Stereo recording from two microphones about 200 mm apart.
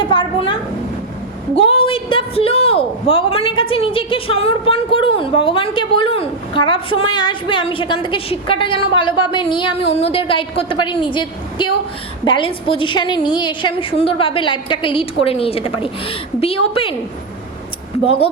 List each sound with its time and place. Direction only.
0.0 s a sound: 25° left (ahead or behind)
1.5 s a woman's voice: 25° left (ahead or behind)
18.0 s a woman's voice: 30° left (ahead or behind)